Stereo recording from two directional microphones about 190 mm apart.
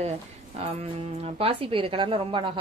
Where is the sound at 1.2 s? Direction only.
30° right (ahead or behind).